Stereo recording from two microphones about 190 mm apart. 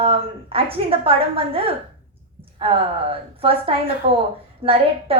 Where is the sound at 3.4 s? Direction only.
30° right (ahead or behind).